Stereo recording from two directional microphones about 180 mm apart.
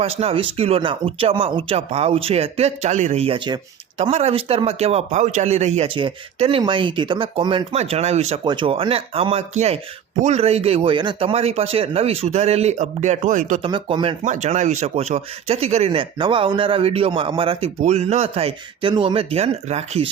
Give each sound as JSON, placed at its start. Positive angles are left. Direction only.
{"t": 0.0, "sound": "speech", "side_deg": -35}
{"t": 13.6, "sound": "speech", "side_deg": -30}
{"t": 14.3, "sound": "speech", "side_deg": -40}